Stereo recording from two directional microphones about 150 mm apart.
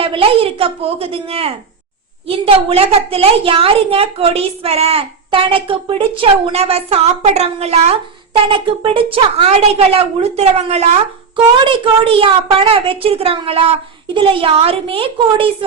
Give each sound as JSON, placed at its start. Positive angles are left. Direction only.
{"t": 0.0, "sound": "a woman's voice", "side_deg": -35}
{"t": 11.6, "sound": "a woman's voice", "side_deg": -35}